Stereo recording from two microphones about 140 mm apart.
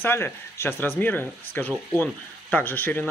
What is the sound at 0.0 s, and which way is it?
Speech, 15° left (ahead or behind).